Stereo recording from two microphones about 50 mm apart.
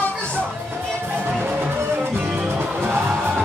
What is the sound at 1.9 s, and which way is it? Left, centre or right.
Music, right.